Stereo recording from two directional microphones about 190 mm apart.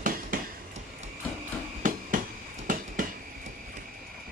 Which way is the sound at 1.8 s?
45° right (ahead or behind).